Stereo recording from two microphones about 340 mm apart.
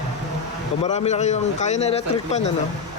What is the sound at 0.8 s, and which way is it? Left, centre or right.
Speech, centre.